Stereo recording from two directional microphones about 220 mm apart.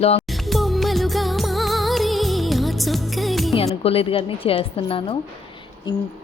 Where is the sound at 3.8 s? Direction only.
25° left (ahead or behind).